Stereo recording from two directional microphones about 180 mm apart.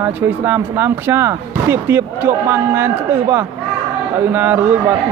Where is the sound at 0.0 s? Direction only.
10° right (ahead or behind).